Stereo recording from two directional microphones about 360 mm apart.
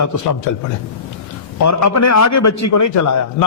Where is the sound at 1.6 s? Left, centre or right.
Left.